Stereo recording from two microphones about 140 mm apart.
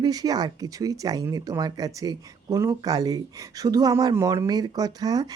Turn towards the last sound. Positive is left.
turn(degrees=-25)  # may be behind; listen again after turning